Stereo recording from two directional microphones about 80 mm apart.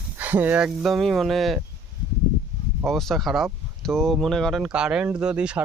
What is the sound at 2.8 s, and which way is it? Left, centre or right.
Speech, centre.